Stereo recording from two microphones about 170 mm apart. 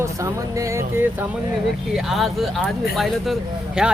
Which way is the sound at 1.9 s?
Centre (ahead or behind).